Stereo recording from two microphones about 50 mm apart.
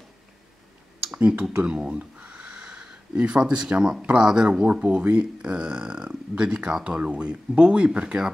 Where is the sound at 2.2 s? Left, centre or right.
Centre.